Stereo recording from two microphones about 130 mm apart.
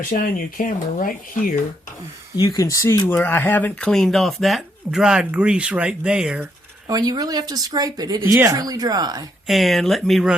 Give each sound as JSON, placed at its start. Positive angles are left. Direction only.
{"t": 0.1, "sound": "speech", "side_deg": 90}
{"t": 2.3, "sound": "speech", "side_deg": 30}
{"t": 6.8, "sound": "speech", "side_deg": -30}
{"t": 8.2, "sound": "speech", "side_deg": -20}
{"t": 9.5, "sound": "speech", "side_deg": 0}